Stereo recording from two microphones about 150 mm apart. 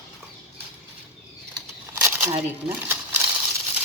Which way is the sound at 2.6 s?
15° right (ahead or behind).